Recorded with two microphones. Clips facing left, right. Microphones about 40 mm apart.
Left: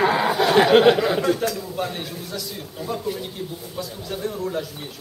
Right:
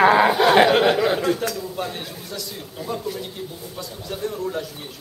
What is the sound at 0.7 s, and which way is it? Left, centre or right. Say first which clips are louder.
Speech: left 2 dB; centre.